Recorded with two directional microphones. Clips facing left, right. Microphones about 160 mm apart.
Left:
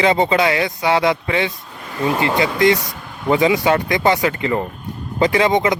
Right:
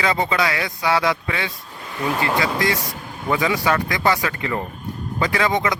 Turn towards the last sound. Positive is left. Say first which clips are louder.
# left 5 dB
turn(degrees=20)  # may be behind; listen again after turning